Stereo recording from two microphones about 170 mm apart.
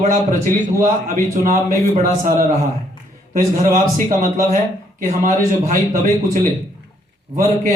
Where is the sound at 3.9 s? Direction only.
55° right (ahead or behind).